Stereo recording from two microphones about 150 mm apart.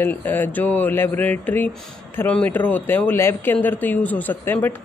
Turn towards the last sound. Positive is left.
turn(degrees=15)  # may be behind; listen again after turning